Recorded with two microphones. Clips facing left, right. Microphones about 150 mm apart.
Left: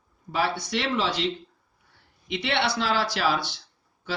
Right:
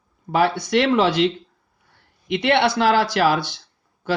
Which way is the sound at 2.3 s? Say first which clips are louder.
Right 8 dB; 55° right (ahead or behind).